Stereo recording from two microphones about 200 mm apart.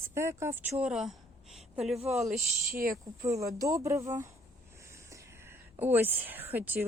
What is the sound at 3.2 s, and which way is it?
A woman's voice, 15° right (ahead or behind).